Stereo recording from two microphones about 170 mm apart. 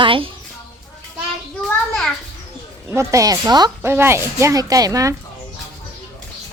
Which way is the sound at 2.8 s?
15° right (ahead or behind).